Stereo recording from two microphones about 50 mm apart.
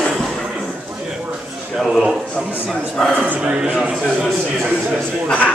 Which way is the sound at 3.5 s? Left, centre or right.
Centre.